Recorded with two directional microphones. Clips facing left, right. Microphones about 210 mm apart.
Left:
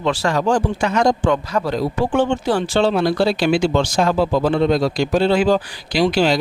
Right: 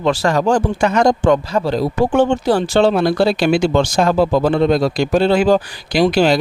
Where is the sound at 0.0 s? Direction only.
40° right (ahead or behind).